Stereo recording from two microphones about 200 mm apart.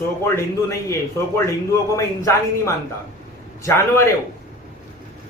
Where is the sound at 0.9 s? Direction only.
15° left (ahead or behind).